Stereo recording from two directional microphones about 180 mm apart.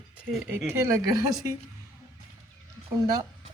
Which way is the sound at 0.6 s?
15° right (ahead or behind).